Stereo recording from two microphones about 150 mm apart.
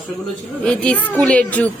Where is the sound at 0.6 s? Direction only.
5° left (ahead or behind).